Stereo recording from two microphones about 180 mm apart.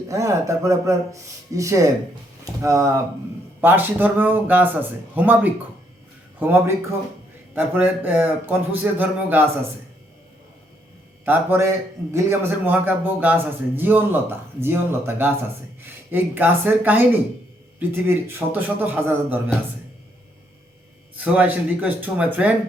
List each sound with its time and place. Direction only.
0.1 s a man's voice: 15° right (ahead or behind)
11.3 s a man's voice: 15° right (ahead or behind)
21.2 s a man's voice: 10° right (ahead or behind)